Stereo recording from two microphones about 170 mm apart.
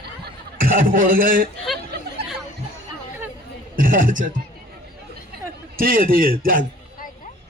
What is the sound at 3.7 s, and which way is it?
Speech, 55° right (ahead or behind).